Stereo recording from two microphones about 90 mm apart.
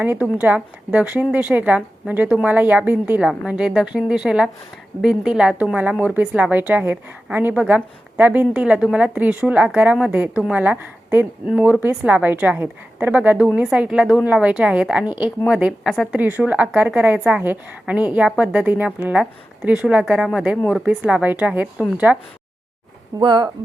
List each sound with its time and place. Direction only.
0.0 s speech: 20° right (ahead or behind)
23.2 s speech: 60° right (ahead or behind)